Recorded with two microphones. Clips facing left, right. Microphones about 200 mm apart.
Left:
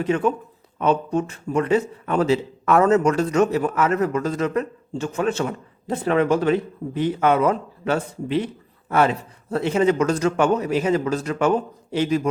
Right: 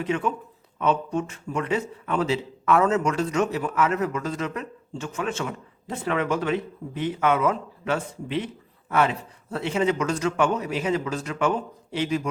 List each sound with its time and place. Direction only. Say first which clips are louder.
0.0 s a man's voice: left 5 dB; 40° left (ahead or behind)